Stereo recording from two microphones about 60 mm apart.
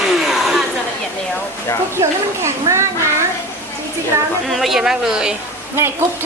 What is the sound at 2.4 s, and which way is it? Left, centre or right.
Children playing, right.